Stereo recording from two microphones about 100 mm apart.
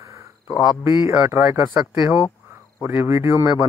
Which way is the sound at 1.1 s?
20° right (ahead or behind).